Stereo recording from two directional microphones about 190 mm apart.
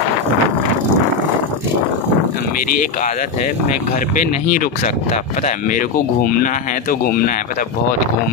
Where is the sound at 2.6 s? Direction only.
45° left (ahead or behind).